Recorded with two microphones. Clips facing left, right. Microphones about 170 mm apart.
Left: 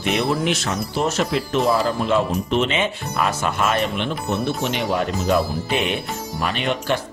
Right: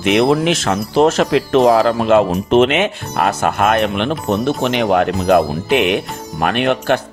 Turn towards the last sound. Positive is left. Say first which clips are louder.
# right 7 dB
turn(degrees=-65)  # may be behind; listen again after turning